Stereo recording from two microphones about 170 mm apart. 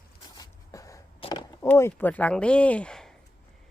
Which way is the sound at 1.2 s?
30° left (ahead or behind).